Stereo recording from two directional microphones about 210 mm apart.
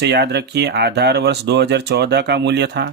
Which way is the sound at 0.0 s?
50° right (ahead or behind).